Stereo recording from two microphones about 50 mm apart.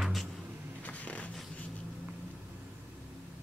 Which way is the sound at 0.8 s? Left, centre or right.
Left.